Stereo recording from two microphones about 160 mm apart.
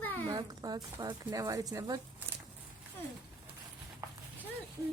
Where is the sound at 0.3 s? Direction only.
25° right (ahead or behind).